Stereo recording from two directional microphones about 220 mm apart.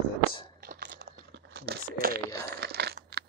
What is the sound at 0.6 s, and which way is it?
Crumpling, 40° right (ahead or behind).